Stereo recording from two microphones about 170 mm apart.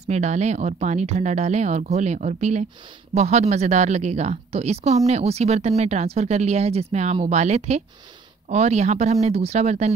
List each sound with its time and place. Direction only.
0.1 s a woman's voice: 40° right (ahead or behind)